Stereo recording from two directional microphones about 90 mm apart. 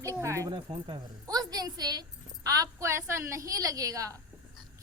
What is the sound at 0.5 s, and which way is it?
Speech, 60° right (ahead or behind).